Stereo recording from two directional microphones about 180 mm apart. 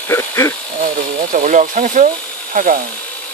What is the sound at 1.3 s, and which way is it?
Speech, 45° right (ahead or behind).